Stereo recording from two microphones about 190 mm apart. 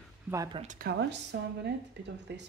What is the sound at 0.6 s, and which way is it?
Speech, 40° right (ahead or behind).